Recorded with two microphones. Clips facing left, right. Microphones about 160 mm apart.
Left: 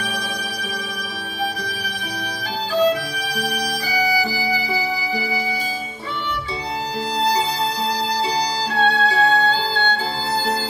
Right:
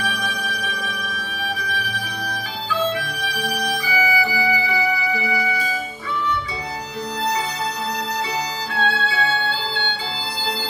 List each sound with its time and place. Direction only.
0.0 s music: 35° left (ahead or behind)
8.7 s music: 35° left (ahead or behind)